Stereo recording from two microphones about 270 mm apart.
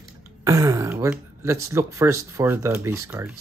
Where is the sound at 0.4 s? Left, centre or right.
Centre.